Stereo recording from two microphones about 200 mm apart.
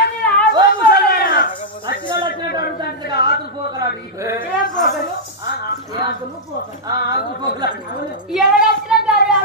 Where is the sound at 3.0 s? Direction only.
55° left (ahead or behind).